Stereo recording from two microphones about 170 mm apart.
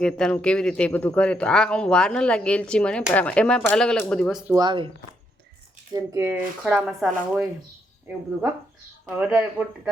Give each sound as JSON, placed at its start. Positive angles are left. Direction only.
{"t": 0.0, "sound": "speech", "side_deg": 5}
{"t": 4.5, "sound": "speech", "side_deg": -25}
{"t": 5.9, "sound": "speech", "side_deg": -20}
{"t": 9.1, "sound": "speech", "side_deg": -10}